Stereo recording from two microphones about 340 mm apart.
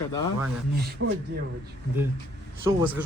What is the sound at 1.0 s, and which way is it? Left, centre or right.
Speech, right.